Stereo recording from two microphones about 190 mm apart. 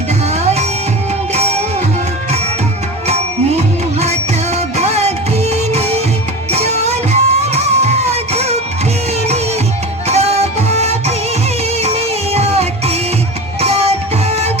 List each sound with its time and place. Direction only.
1.3 s music: 35° right (ahead or behind)
4.5 s music: 35° right (ahead or behind)
10.1 s music: 35° right (ahead or behind)